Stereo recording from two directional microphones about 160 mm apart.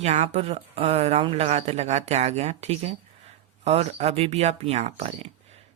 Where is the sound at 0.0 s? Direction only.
40° right (ahead or behind).